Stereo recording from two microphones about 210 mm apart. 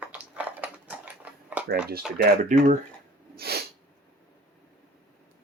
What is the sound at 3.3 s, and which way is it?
Sneeze, 50° right (ahead or behind).